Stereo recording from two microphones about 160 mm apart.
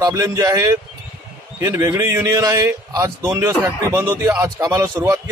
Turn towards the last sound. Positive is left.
turn(degrees=-20)  # may be behind; listen again after turning